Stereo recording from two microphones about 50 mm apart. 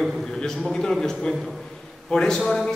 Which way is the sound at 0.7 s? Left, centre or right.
Centre.